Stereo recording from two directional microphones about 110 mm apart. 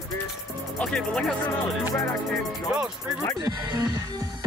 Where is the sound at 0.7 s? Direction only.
5° left (ahead or behind).